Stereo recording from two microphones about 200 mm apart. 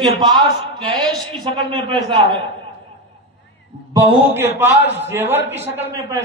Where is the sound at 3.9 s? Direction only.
15° right (ahead or behind).